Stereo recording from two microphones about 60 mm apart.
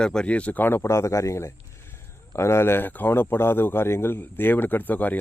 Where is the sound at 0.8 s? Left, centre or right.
Left.